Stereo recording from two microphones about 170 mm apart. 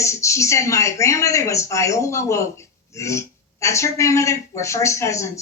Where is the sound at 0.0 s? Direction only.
15° left (ahead or behind).